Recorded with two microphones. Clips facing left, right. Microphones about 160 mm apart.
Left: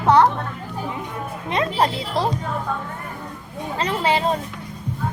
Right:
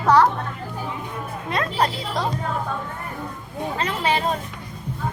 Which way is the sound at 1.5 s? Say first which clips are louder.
Left 2 dB; 25° left (ahead or behind).